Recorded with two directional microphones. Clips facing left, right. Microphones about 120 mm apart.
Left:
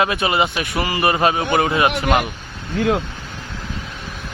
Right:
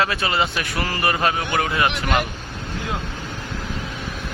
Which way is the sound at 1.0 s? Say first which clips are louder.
Left 4 dB; 20° left (ahead or behind).